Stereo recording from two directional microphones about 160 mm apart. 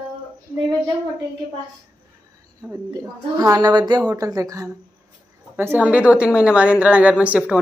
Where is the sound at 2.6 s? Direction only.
20° right (ahead or behind).